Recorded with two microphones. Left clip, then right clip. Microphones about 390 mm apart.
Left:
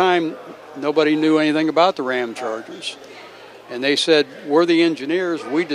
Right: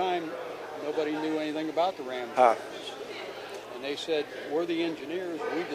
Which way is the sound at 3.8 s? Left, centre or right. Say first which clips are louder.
Left 15 dB; left.